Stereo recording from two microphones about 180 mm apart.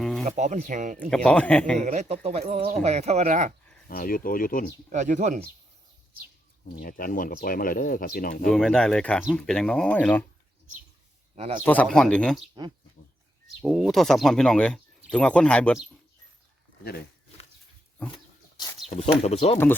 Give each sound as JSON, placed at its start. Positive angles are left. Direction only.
{"t": 0.3, "sound": "speech", "side_deg": -45}
{"t": 1.1, "sound": "speech", "side_deg": 5}
{"t": 1.8, "sound": "speech", "side_deg": -40}
{"t": 3.8, "sound": "speech", "side_deg": 55}
{"t": 4.9, "sound": "speech", "side_deg": -45}
{"t": 6.7, "sound": "speech", "side_deg": 50}
{"t": 8.5, "sound": "speech", "side_deg": 5}
{"t": 11.3, "sound": "speech", "side_deg": -35}
{"t": 11.6, "sound": "speech", "side_deg": 10}
{"t": 13.6, "sound": "speech", "side_deg": -5}
{"t": 18.1, "sound": "dog", "side_deg": 25}
{"t": 18.9, "sound": "speech", "side_deg": 35}